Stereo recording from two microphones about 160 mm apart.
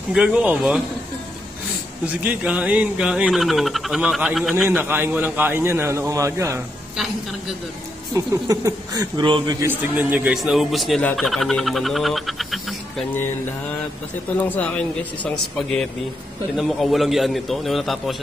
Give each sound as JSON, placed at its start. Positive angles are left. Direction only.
{"t": 0.1, "sound": "a man's voice", "side_deg": -5}
{"t": 2.2, "sound": "speech", "side_deg": -10}
{"t": 4.6, "sound": "a man's voice", "side_deg": -15}
{"t": 8.1, "sound": "speech", "side_deg": -20}
{"t": 9.6, "sound": "speech", "side_deg": -10}
{"t": 14.5, "sound": "speech", "side_deg": 10}